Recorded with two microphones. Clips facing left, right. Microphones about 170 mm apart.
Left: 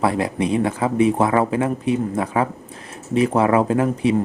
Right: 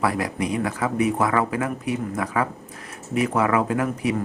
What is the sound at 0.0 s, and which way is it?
Speech, 25° left (ahead or behind).